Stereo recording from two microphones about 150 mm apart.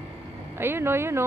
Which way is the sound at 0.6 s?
15° right (ahead or behind).